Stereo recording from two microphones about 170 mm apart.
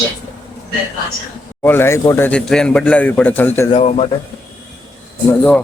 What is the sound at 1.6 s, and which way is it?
Speech, 15° left (ahead or behind).